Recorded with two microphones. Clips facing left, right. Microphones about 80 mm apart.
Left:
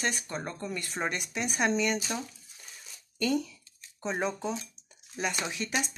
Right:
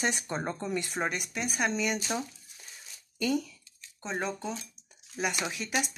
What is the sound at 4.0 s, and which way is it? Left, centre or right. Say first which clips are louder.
Speech: left 2 dB; centre.